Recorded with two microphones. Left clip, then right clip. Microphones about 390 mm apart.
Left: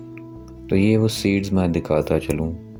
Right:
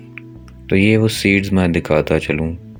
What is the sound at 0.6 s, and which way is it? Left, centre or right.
Speech, left.